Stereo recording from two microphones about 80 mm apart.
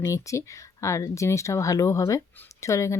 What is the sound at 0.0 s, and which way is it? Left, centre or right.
Speech, left.